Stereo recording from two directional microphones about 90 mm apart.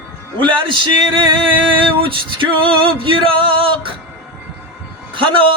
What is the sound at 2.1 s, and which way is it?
Music, 70° right (ahead or behind).